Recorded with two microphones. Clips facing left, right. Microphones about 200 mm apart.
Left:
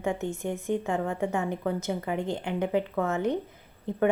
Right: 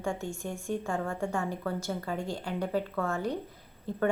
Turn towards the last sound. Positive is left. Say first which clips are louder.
# left 3 dB
turn(degrees=20)  # may be behind; listen again after turning